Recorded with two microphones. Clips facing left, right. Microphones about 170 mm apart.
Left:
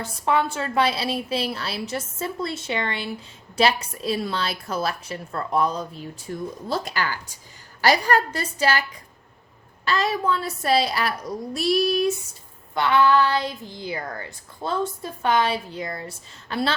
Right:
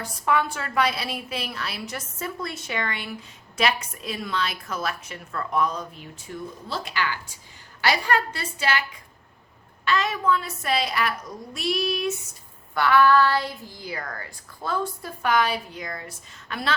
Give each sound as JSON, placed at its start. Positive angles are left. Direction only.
{"t": 0.0, "sound": "a woman's voice", "side_deg": 25}
{"t": 9.8, "sound": "a woman's voice", "side_deg": 35}
{"t": 12.7, "sound": "speech", "side_deg": 20}